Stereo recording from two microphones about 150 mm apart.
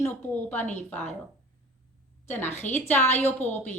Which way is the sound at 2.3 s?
15° left (ahead or behind).